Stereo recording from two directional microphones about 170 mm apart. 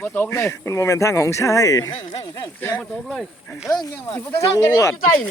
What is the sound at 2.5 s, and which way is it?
Speech, 10° left (ahead or behind).